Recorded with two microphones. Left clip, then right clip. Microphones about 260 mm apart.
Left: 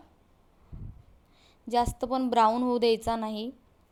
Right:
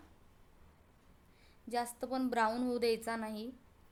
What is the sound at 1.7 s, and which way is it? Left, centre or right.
A woman's voice, left.